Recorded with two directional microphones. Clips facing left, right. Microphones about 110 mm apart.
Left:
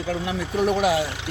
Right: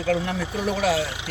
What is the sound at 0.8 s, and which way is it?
Speech, 15° left (ahead or behind).